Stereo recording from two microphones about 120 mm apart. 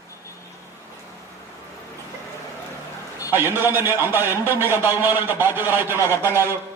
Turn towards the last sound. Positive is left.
turn(degrees=-20)  # may be behind; listen again after turning